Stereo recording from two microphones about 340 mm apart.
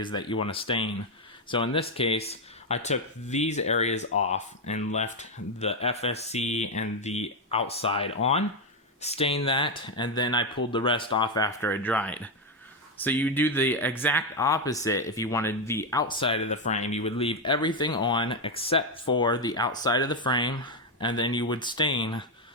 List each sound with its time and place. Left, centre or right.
0.0 s speech: centre